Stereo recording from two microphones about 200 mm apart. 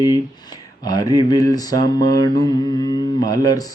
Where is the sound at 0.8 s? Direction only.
20° left (ahead or behind).